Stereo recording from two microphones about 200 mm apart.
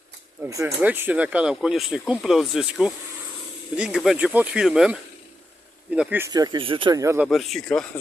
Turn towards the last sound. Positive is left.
turn(degrees=0)  # may be behind; listen again after turning